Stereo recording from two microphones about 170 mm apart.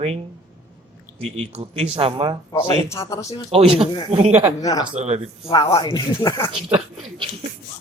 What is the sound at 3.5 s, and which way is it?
Speech, 30° right (ahead or behind).